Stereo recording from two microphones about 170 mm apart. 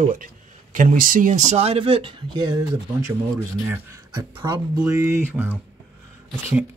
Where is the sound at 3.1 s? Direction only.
10° right (ahead or behind).